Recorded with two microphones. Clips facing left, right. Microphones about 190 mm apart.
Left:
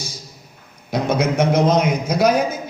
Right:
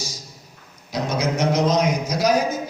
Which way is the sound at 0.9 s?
55° left (ahead or behind).